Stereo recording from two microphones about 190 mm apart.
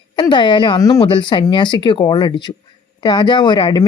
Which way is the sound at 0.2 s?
25° left (ahead or behind).